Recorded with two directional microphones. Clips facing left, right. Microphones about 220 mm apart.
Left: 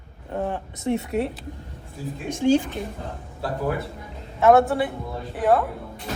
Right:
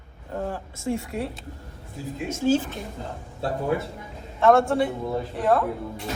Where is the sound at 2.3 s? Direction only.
15° left (ahead or behind).